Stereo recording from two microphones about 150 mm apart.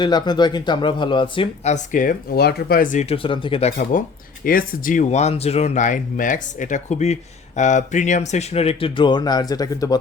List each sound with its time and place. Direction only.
0.0 s speech: 30° left (ahead or behind)
1.6 s speech: 55° left (ahead or behind)
3.1 s speech: 35° left (ahead or behind)
4.4 s speech: 65° left (ahead or behind); by 10.0 s 25° left (ahead or behind)